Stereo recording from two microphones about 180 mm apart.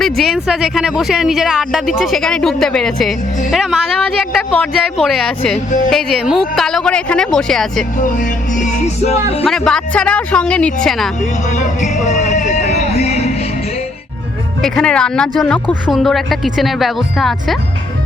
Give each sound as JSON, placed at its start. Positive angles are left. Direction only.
{"t": 0.0, "sound": "speech", "side_deg": 0}
{"t": 7.9, "sound": "music", "side_deg": 45}
{"t": 9.5, "sound": "speech", "side_deg": 5}
{"t": 12.0, "sound": "music", "side_deg": 40}
{"t": 14.6, "sound": "speech", "side_deg": 5}